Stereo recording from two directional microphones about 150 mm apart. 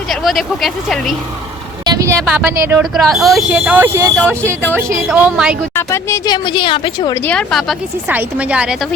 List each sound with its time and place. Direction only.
0.1 s speech: centre (ahead or behind)
1.8 s vehicle: 25° right (ahead or behind)
2.3 s a woman's voice: 15° right (ahead or behind)
2.9 s speech: centre (ahead or behind)
3.5 s a woman's voice: 10° right (ahead or behind)
5.7 s a woman's voice: 20° left (ahead or behind); by 7.1 s 35° left (ahead or behind)
7.1 s a woman's voice: 10° left (ahead or behind)
8.0 s a woman's voice: 10° right (ahead or behind)